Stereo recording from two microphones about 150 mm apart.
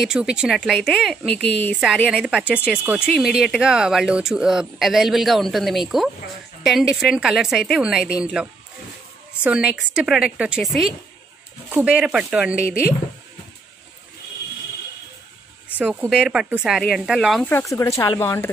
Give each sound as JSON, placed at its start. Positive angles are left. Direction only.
{"t": 0.0, "sound": "speech", "side_deg": -5}
{"t": 15.8, "sound": "speech", "side_deg": -10}
{"t": 17.5, "sound": "speech", "side_deg": 20}